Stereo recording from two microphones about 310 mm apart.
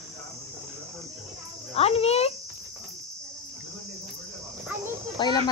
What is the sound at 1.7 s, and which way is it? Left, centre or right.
Speech, centre.